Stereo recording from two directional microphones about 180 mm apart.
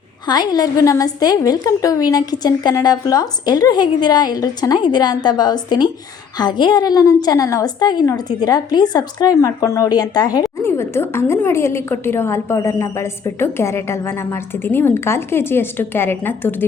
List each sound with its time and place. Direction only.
0.3 s a woman's voice: 20° left (ahead or behind)